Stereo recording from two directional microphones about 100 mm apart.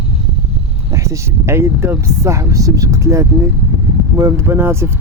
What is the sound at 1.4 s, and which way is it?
Speech, 25° right (ahead or behind).